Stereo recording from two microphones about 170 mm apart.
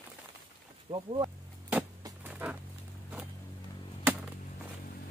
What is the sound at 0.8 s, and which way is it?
Speech, 30° right (ahead or behind).